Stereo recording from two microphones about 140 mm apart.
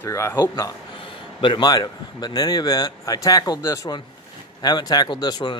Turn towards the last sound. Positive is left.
turn(degrees=30)  # may be behind; listen again after turning